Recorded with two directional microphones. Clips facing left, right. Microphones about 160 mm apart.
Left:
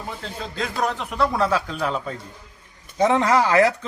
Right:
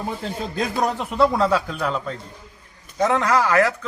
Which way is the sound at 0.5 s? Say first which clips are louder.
Right 2 dB; 15° right (ahead or behind).